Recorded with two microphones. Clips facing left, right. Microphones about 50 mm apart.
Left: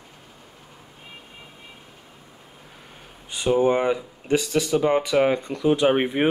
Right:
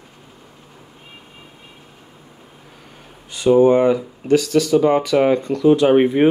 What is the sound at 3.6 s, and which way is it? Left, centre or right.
Speech, centre.